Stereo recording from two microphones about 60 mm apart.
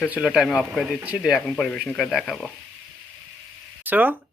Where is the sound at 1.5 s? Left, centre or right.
Centre.